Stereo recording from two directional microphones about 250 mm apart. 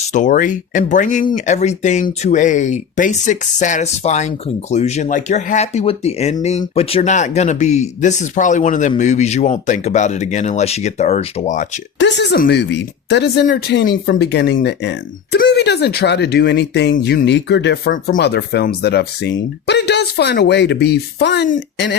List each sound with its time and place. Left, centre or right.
0.1 s speech: left
11.9 s speech: left